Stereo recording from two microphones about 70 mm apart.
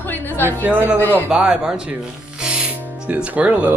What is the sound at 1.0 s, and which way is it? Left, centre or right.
Speech, left.